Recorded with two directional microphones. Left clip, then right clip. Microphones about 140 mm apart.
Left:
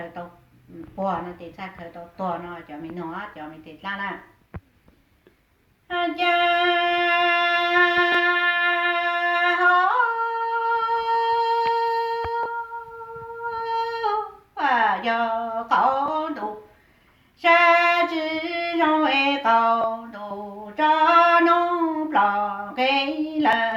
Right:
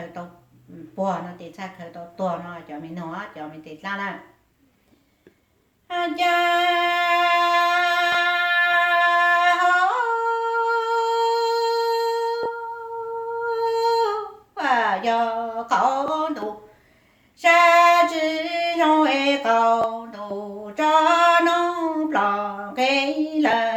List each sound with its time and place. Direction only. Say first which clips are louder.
0.9 s speech: right 1 dB; 35° right (ahead or behind)
5.9 s music: right 1 dB; 35° right (ahead or behind)
13.5 s humming: right 5 dB; 35° right (ahead or behind)
14.5 s speech: even; 35° right (ahead or behind)
17.4 s female singing: right 2 dB; 35° right (ahead or behind)
20.7 s music: even; 35° right (ahead or behind)
22.1 s a sound: left 3 dB; 35° right (ahead or behind)